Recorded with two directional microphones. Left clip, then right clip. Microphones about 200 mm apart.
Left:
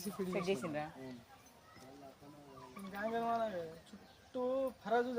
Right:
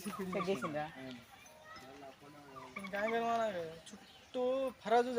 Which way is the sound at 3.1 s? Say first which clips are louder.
Right 1 dB; 30° right (ahead or behind).